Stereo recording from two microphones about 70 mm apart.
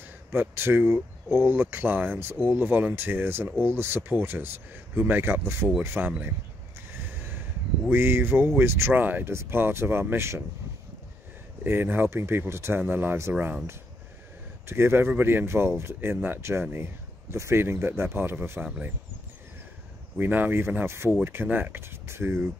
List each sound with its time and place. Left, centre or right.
0.3 s speech: right
7.1 s a sound: right
7.9 s speech: right
11.6 s speech: right
14.7 s speech: right
20.2 s speech: right